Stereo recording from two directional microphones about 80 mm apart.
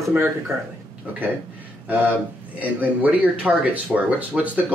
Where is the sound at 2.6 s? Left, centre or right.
Right.